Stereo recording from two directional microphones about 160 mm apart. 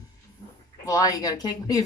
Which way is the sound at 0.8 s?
20° left (ahead or behind).